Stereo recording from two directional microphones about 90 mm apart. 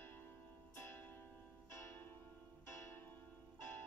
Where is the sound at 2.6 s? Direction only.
30° left (ahead or behind).